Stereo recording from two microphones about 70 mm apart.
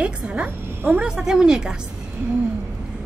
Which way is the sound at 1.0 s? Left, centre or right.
Centre.